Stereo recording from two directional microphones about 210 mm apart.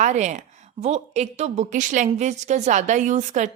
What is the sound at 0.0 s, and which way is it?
A woman's voice, 35° right (ahead or behind).